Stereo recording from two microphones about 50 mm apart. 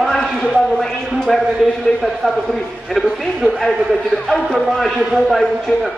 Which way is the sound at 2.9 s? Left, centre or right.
Centre.